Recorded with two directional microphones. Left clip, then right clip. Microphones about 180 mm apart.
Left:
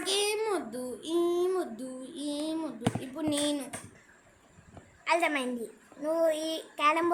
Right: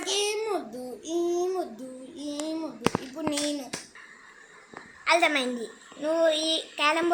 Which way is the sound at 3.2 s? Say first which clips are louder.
Right 1 dB; 20° left (ahead or behind).